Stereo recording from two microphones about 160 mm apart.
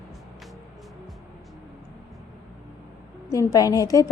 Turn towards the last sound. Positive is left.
turn(degrees=20)  # may be behind; listen again after turning